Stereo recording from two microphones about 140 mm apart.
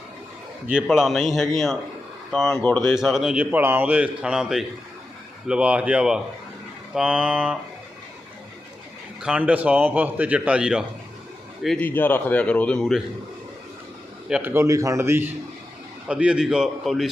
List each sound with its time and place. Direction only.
0.7 s a man's voice: 5° right (ahead or behind)
2.5 s a man's voice: 15° left (ahead or behind)
2.9 s a man's voice: centre (ahead or behind)
9.2 s a man's voice: 10° right (ahead or behind)
11.8 s a man's voice: 15° left (ahead or behind)
14.3 s a sound: 5° right (ahead or behind)
14.5 s a man's voice: 20° right (ahead or behind)
16.0 s a man's voice: 5° right (ahead or behind)